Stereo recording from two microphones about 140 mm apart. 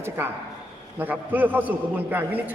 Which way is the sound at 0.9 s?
15° right (ahead or behind).